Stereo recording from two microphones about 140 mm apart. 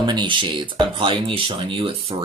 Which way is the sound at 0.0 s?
30° right (ahead or behind).